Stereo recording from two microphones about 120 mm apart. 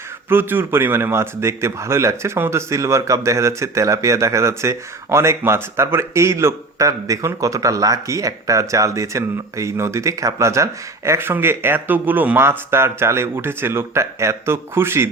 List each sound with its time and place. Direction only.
0.3 s a man's voice: 20° right (ahead or behind)